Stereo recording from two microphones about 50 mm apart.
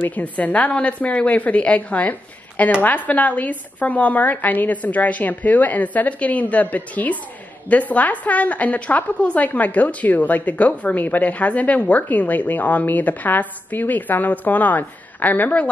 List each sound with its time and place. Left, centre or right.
0.0 s a woman's voice: left